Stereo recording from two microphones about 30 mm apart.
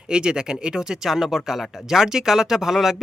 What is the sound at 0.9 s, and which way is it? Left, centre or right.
Speech, centre.